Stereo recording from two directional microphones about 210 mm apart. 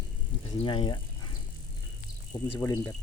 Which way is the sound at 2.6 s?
5° left (ahead or behind).